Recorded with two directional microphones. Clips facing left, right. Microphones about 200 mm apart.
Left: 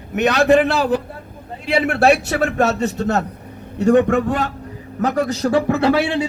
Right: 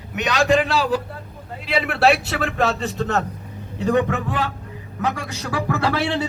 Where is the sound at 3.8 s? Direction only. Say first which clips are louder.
Left 6 dB; 45° left (ahead or behind).